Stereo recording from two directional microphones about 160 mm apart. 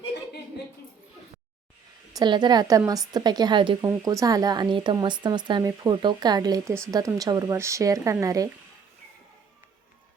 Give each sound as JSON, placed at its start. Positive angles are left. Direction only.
{"t": 2.1, "sound": "a woman's voice", "side_deg": -25}